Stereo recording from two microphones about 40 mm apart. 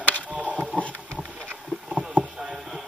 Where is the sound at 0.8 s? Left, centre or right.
Left.